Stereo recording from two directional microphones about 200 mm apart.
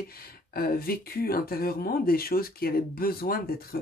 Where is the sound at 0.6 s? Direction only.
50° left (ahead or behind).